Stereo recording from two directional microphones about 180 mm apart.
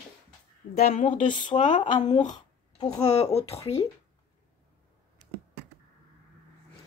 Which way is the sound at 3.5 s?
35° left (ahead or behind).